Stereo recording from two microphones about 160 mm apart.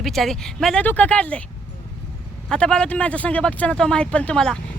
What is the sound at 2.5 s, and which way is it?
Speech, 5° left (ahead or behind).